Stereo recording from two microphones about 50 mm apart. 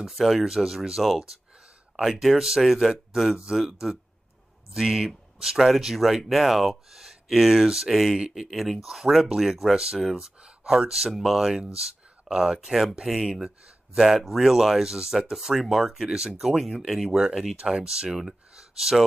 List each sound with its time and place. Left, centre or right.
0.0 s speech: centre
4.7 s speech: centre
16.4 s speech: centre